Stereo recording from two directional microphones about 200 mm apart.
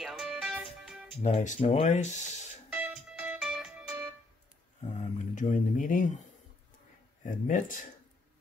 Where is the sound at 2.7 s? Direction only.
5° right (ahead or behind).